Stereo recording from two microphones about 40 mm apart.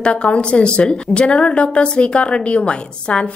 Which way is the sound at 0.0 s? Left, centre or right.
Left.